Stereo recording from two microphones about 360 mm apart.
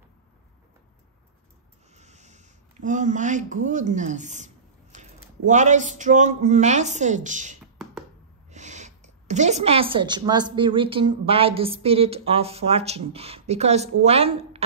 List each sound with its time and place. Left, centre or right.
2.0 s a woman's voice: centre